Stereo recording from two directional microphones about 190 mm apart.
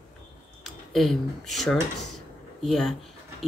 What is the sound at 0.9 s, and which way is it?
Speech, centre (ahead or behind).